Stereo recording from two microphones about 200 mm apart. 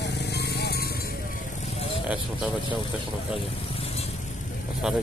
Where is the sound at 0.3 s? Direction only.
55° left (ahead or behind).